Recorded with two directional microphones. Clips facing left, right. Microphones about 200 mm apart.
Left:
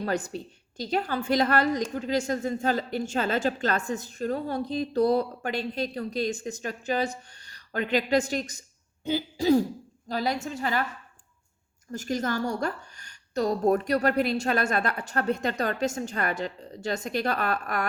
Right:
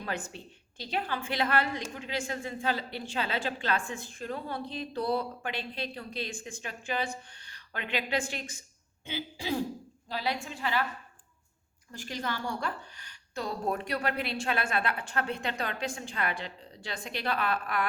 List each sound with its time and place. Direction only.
0.0 s a woman's voice: 40° left (ahead or behind)
11.9 s a woman's voice: 45° left (ahead or behind)